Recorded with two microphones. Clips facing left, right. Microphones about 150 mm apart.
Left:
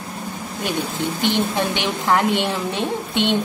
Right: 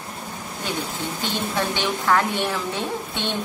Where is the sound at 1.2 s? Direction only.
20° left (ahead or behind).